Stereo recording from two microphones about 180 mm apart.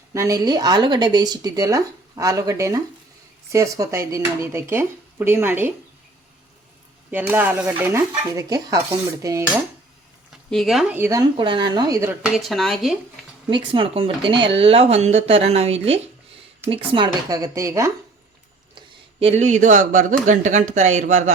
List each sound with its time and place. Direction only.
0.1 s speech: 15° right (ahead or behind)
7.1 s speech: 10° right (ahead or behind)
10.5 s speech: centre (ahead or behind)
10.9 s speech: 15° right (ahead or behind)
12.2 s speech: centre (ahead or behind)
13.7 s speech: 30° right (ahead or behind)
19.2 s speech: 40° right (ahead or behind)